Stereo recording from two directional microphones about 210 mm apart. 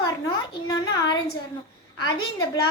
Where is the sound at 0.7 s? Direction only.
20° left (ahead or behind).